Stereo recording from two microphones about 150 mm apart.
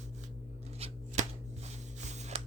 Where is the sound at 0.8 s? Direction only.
40° right (ahead or behind).